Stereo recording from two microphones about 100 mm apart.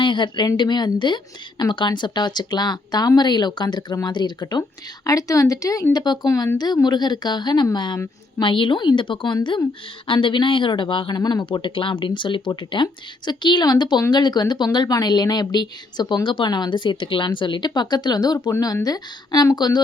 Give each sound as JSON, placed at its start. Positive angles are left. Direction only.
{"t": 0.0, "sound": "speech", "side_deg": 50}
{"t": 5.0, "sound": "speech", "side_deg": 35}
{"t": 8.4, "sound": "speech", "side_deg": 60}
{"t": 11.4, "sound": "speech", "side_deg": 55}